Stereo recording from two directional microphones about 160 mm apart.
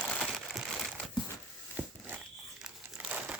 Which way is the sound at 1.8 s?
10° right (ahead or behind).